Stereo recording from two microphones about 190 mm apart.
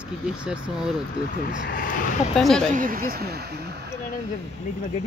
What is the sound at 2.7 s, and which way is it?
Speech, 50° right (ahead or behind).